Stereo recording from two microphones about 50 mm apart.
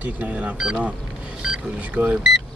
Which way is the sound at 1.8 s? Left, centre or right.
Right.